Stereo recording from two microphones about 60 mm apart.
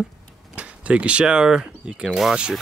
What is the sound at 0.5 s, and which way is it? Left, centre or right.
Speech, right.